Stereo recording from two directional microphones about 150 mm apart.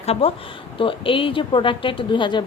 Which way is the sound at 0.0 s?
45° left (ahead or behind).